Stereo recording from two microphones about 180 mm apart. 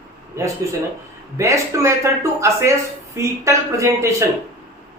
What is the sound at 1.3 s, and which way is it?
Speech, 15° right (ahead or behind).